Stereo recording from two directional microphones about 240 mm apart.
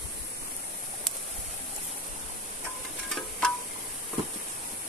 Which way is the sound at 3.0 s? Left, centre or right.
Centre.